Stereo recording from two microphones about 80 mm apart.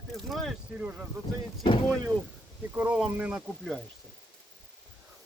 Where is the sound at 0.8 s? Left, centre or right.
Centre.